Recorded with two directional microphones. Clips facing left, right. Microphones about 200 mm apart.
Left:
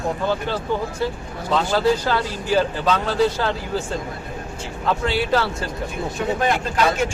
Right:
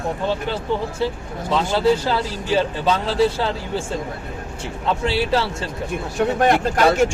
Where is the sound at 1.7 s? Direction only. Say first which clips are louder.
Right 2 dB; 25° right (ahead or behind).